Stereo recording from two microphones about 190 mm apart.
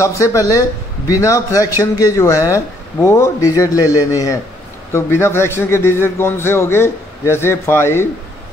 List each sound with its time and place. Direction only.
0.0 s a man's voice: 15° left (ahead or behind)